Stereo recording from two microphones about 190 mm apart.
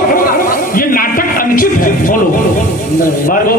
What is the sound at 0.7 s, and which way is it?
Music, 50° left (ahead or behind).